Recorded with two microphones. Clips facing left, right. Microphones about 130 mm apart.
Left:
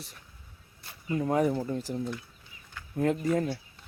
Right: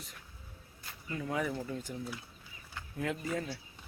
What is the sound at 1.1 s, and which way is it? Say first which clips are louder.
Speech: left 9 dB; 40° left (ahead or behind).